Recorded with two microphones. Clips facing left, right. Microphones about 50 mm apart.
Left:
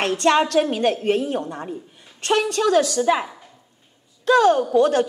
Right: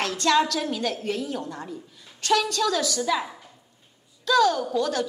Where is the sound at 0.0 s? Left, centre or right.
Left.